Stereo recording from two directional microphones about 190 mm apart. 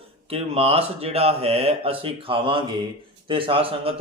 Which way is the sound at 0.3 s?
30° right (ahead or behind).